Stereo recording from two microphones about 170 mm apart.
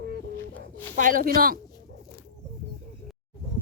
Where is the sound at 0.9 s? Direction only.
50° right (ahead or behind).